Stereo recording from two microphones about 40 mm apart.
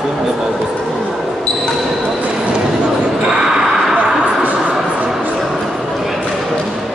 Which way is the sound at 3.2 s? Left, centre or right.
Centre.